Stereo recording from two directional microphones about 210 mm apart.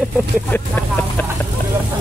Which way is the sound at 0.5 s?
10° left (ahead or behind).